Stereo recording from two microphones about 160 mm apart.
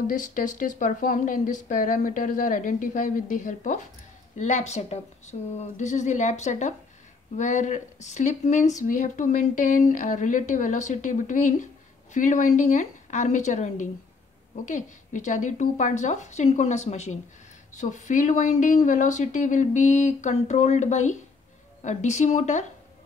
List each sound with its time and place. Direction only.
0.0 s speech: 55° left (ahead or behind)